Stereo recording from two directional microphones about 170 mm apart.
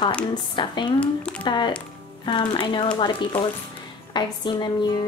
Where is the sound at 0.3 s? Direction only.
25° left (ahead or behind).